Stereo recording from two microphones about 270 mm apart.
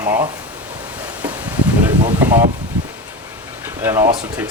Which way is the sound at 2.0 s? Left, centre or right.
Centre.